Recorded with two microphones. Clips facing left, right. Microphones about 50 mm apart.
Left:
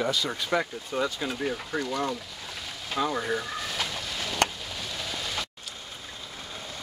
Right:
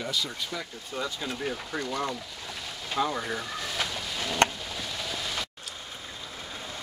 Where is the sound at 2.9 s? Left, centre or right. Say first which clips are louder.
Left 1 dB; centre.